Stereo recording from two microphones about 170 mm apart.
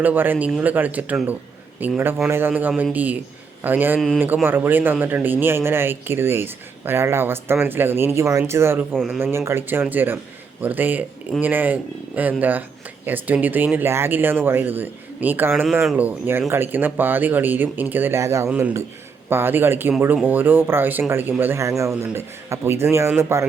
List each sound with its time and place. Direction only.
0.0 s speech: 10° right (ahead or behind)
9.0 s speech: centre (ahead or behind)
9.2 s speech: 15° right (ahead or behind)